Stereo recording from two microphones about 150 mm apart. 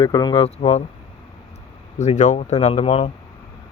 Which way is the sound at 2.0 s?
55° left (ahead or behind).